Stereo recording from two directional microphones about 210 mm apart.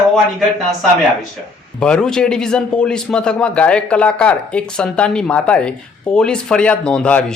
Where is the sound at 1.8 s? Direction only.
5° left (ahead or behind).